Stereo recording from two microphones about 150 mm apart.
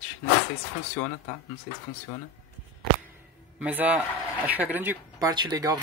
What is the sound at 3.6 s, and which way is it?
Speech, 10° right (ahead or behind).